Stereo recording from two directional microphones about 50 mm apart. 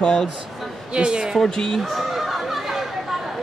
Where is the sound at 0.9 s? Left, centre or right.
Right.